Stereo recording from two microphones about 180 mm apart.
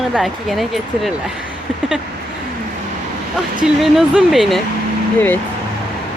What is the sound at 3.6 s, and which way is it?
Speech, 5° right (ahead or behind).